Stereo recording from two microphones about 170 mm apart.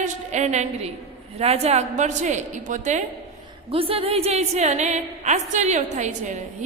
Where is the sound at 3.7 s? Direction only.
35° right (ahead or behind).